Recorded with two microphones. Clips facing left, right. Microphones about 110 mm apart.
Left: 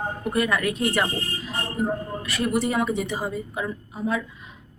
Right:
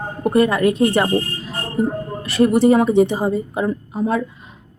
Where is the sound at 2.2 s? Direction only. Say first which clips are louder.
Right 11 dB; 30° right (ahead or behind).